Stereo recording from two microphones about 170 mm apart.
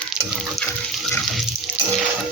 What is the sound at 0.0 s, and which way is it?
Frying, centre (ahead or behind).